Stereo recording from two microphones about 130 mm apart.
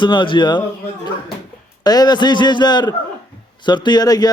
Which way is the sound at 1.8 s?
30° left (ahead or behind).